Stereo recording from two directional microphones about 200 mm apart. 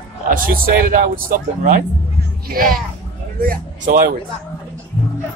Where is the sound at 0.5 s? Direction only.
50° right (ahead or behind).